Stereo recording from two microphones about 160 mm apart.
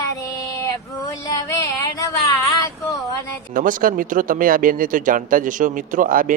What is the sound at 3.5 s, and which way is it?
Speech, 60° right (ahead or behind).